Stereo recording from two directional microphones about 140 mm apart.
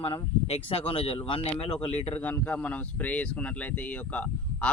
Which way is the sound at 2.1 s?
10° left (ahead or behind).